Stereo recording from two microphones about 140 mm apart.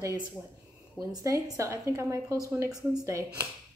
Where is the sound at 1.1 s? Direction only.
25° right (ahead or behind).